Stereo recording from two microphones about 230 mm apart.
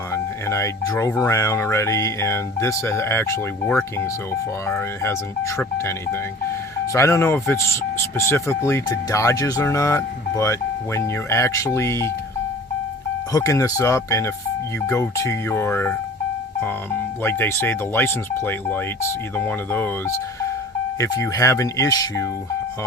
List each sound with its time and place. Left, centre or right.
0.1 s speech: centre
13.3 s speech: centre
17.2 s speech: centre